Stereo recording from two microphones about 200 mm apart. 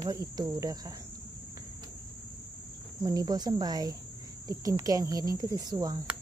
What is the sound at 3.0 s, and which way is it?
Cricket, 20° right (ahead or behind).